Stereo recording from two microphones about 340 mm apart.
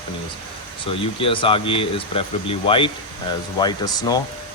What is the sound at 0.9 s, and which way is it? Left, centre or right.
Speech, centre.